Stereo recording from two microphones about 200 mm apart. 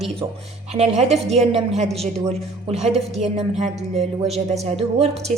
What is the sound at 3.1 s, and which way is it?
A woman's voice, 35° right (ahead or behind).